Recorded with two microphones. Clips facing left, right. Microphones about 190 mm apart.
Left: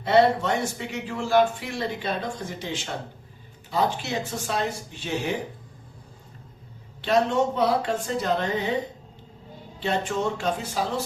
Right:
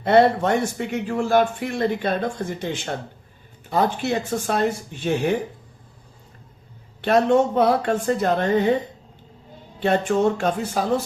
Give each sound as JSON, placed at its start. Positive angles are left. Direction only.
{"t": 0.0, "sound": "a man's voice", "side_deg": -55}
{"t": 7.0, "sound": "a man's voice", "side_deg": -55}
{"t": 9.8, "sound": "speech", "side_deg": -55}